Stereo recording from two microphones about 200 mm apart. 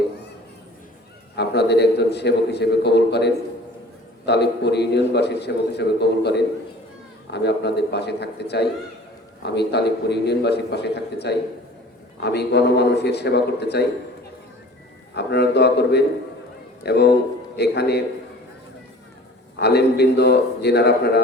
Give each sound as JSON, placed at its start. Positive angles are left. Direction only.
{"t": 1.4, "sound": "a man's voice", "side_deg": 55}
{"t": 15.1, "sound": "a man's voice", "side_deg": 55}
{"t": 19.5, "sound": "a man's voice", "side_deg": 55}